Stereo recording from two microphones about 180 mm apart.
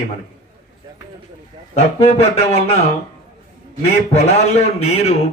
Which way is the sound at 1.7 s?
35° left (ahead or behind).